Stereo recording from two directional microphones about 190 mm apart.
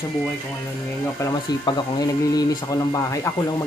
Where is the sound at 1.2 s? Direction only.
20° left (ahead or behind).